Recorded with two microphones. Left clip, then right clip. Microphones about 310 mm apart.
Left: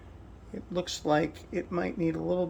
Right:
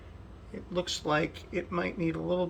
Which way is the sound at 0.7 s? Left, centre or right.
Centre.